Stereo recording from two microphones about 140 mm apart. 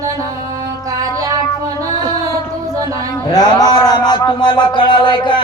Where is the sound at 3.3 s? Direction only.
30° left (ahead or behind).